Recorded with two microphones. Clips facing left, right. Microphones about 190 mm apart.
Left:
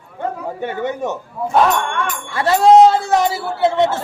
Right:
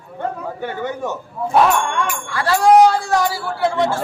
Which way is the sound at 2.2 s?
20° left (ahead or behind).